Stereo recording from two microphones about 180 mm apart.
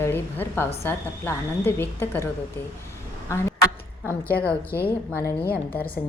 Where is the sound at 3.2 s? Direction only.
15° left (ahead or behind).